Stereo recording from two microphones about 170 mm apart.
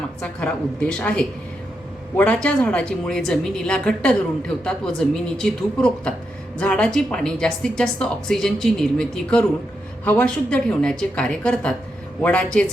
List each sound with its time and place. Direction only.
0.2 s a woman's voice: 5° left (ahead or behind)